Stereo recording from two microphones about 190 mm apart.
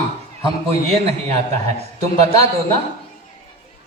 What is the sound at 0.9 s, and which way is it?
Speech, 35° right (ahead or behind).